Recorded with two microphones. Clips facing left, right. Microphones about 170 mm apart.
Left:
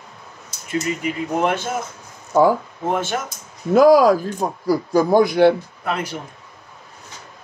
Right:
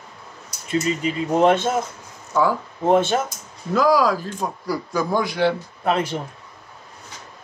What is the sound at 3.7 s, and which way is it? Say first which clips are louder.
Speech: left 6 dB; 50° left (ahead or behind).